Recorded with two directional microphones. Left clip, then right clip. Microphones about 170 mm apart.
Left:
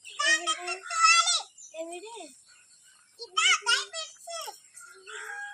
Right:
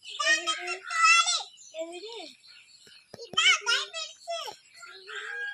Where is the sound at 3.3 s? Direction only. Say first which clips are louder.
Right 1 dB; 85° left.